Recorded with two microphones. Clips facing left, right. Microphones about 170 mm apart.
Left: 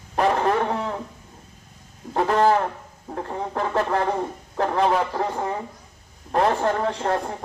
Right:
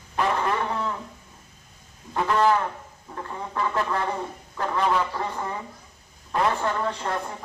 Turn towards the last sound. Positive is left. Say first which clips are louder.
# left 5 dB
turn(degrees=45)  # may be behind; listen again after turning